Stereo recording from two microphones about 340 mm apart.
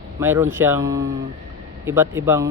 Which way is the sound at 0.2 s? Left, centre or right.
Centre.